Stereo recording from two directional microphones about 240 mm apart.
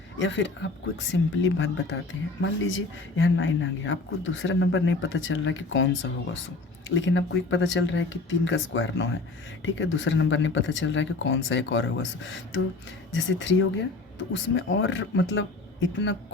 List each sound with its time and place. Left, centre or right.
0.2 s speech: left